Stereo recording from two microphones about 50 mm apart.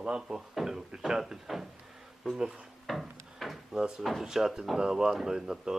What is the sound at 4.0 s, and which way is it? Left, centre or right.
Speech, centre.